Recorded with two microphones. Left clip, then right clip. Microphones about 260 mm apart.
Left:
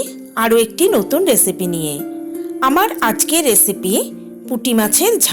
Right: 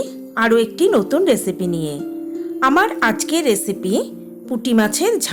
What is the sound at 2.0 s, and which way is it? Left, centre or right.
Music, left.